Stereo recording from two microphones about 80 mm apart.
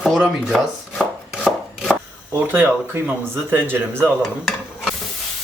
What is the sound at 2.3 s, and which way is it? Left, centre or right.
Speech, right.